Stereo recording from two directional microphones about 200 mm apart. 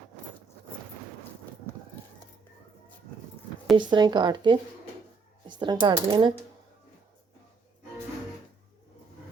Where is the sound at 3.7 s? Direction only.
20° right (ahead or behind).